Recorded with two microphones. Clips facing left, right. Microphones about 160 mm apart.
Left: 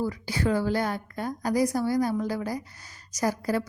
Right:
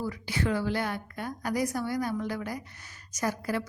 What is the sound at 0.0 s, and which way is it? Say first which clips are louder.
A woman's voice: left 3 dB; 35° left (ahead or behind).